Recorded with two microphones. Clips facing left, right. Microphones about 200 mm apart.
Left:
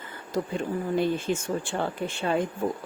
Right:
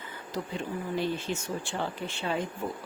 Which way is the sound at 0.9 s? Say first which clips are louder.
Left 5 dB; 50° left (ahead or behind).